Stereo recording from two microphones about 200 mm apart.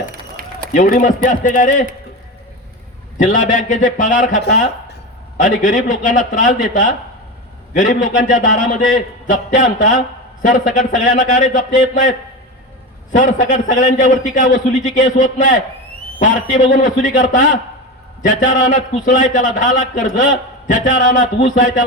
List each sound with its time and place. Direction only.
0.1 s run: 45° right (ahead or behind)
0.7 s a man's voice: 40° left (ahead or behind)
3.2 s a man's voice: 40° left (ahead or behind)